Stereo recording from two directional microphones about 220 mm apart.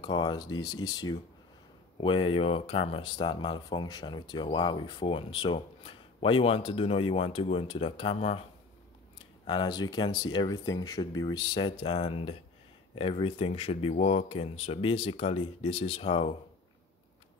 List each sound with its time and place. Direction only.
0.0 s speech: 20° left (ahead or behind)
9.5 s speech: 20° left (ahead or behind)